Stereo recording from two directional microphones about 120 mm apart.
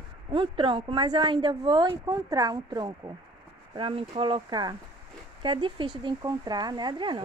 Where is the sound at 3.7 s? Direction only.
45° right (ahead or behind).